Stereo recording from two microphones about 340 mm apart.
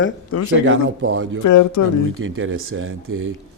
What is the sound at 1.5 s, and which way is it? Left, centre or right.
Speech, left.